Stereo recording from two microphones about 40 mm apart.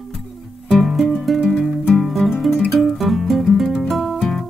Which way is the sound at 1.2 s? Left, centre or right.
Centre.